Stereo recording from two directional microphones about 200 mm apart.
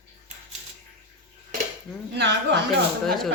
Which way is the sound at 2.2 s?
60° right (ahead or behind).